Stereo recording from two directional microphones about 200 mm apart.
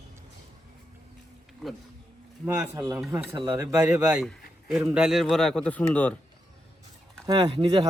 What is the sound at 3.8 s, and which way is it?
A man's voice, 5° right (ahead or behind).